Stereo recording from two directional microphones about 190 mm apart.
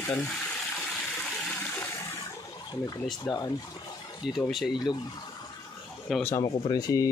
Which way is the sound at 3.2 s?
20° left (ahead or behind).